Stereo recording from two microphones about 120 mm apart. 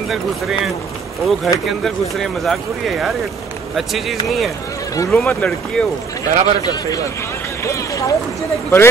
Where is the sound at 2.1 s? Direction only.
Centre (ahead or behind).